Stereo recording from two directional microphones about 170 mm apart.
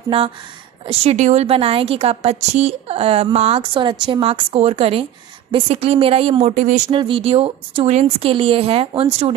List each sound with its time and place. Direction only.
0.8 s a woman's voice: 40° right (ahead or behind)
6.9 s a woman's voice: 30° right (ahead or behind)